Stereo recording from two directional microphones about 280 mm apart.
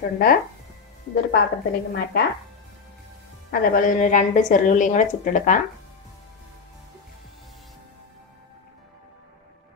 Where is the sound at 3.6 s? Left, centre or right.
Left.